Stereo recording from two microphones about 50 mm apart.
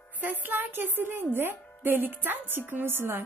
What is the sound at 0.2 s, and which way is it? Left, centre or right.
Speech, right.